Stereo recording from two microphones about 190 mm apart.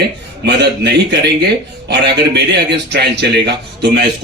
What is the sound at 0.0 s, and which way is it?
Speech, 65° right (ahead or behind).